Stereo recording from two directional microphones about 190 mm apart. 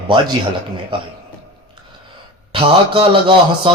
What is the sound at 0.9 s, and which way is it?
Speech, 25° right (ahead or behind).